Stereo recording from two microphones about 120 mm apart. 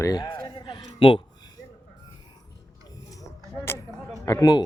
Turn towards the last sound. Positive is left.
turn(degrees=30)  # may be behind; listen again after turning